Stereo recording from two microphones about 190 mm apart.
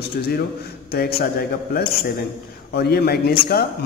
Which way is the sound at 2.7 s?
55° left (ahead or behind).